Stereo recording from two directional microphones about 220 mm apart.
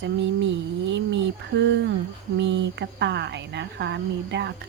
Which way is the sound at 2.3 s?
50° right (ahead or behind).